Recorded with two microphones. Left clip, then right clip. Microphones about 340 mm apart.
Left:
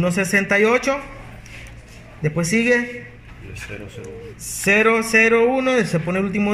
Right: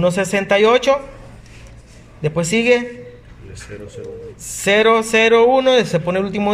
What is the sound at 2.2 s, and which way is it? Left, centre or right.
Speech, right.